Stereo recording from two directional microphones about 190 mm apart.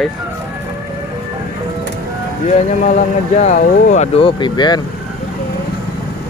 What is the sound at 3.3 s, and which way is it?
Speech, 40° left (ahead or behind).